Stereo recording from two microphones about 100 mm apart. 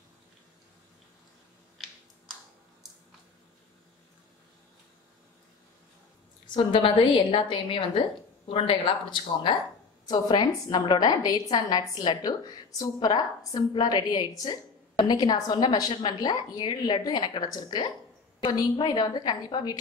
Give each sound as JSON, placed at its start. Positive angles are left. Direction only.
{"t": 6.5, "sound": "a woman's voice", "side_deg": 60}